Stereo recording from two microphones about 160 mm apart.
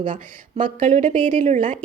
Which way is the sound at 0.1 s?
55° right (ahead or behind).